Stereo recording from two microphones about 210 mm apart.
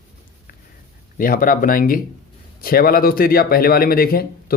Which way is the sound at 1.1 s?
40° left (ahead or behind).